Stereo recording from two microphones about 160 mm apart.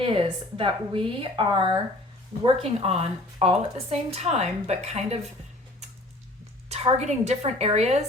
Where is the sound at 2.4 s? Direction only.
40° right (ahead or behind).